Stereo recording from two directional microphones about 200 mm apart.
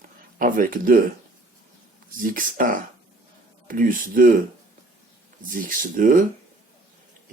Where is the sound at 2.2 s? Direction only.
45° right (ahead or behind).